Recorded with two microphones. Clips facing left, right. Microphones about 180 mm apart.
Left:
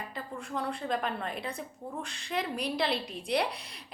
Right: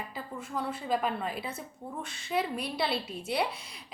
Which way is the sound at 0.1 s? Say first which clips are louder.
Even; 5° right (ahead or behind).